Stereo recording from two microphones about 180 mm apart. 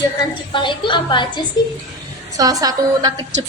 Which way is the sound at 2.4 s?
20° right (ahead or behind).